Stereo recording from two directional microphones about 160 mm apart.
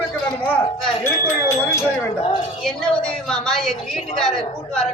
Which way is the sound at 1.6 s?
15° left (ahead or behind).